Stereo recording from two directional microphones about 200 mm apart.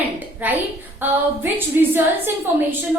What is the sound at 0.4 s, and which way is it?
A woman's voice, 10° right (ahead or behind).